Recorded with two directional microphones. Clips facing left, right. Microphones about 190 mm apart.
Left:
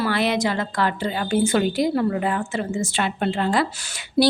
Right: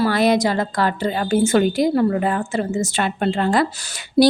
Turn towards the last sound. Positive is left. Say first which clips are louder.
# right 4 dB
turn(degrees=-40)  # may be behind; listen again after turning